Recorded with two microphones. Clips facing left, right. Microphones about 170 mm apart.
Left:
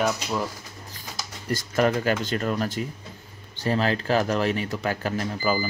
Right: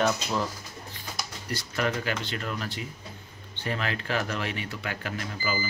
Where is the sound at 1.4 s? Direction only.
45° left (ahead or behind).